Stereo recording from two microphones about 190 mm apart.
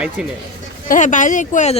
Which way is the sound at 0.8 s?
40° left (ahead or behind).